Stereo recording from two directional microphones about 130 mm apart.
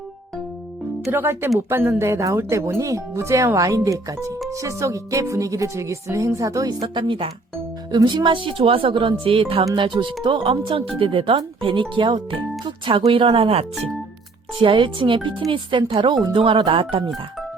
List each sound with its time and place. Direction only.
1.1 s speech: 15° right (ahead or behind)
1.5 s music: 15° right (ahead or behind); by 7.3 s 40° right (ahead or behind)
7.9 s speech: 35° right (ahead or behind)